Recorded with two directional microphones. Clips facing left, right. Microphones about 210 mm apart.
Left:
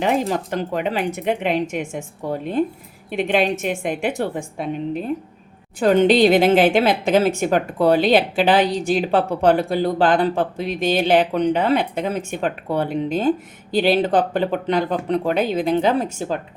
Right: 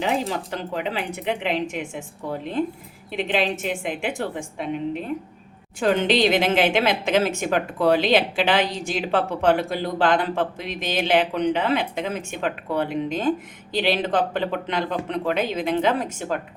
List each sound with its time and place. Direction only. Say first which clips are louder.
0.0 s speech: left 4 dB; 50° left (ahead or behind)
3.1 s speech: left 4 dB; 50° left (ahead or behind)
5.8 s a woman's voice: left 5 dB; 40° left (ahead or behind)